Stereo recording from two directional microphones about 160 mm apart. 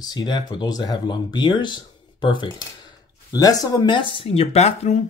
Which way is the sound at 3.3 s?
25° left (ahead or behind).